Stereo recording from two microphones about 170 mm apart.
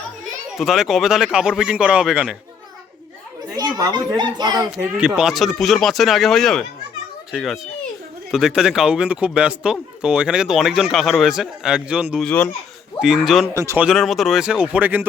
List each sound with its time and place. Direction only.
0.5 s speech: centre (ahead or behind)
3.5 s a child's voice: 20° right (ahead or behind)
4.9 s speech: 5° right (ahead or behind)
13.6 s speech: 15° right (ahead or behind)
13.8 s speech: centre (ahead or behind)